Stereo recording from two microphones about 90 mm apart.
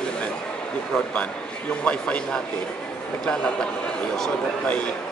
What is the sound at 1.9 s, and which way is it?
Speech, 15° left (ahead or behind).